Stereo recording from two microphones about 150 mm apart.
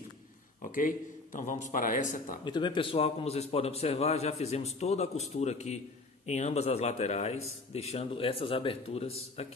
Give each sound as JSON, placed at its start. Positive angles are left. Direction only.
{"t": 0.7, "sound": "speech", "side_deg": 60}
{"t": 2.4, "sound": "a man's voice", "side_deg": 30}